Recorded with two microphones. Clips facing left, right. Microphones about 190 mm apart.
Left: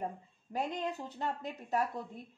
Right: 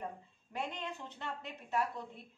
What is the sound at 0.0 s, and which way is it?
Speech, 40° left (ahead or behind).